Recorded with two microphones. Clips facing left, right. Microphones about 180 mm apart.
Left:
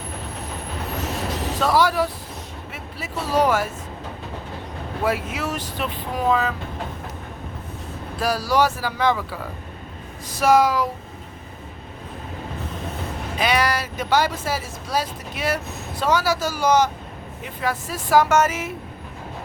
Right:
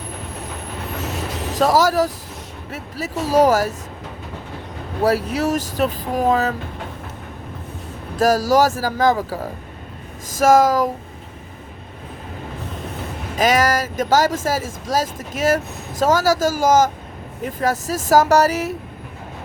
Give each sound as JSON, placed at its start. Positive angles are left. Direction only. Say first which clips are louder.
{"t": 1.5, "sound": "speech", "louder": "right 4 dB", "side_deg": -40}
{"t": 5.0, "sound": "speech", "louder": "right 6 dB", "side_deg": -40}
{"t": 8.1, "sound": "speech", "louder": "right 6 dB", "side_deg": -45}
{"t": 13.4, "sound": "speech", "louder": "right 5 dB", "side_deg": -45}